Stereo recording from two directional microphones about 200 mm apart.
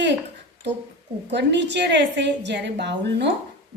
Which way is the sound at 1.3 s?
60° right (ahead or behind).